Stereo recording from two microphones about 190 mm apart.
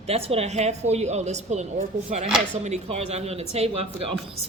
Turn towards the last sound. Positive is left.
turn(degrees=-30)  # may be behind; listen again after turning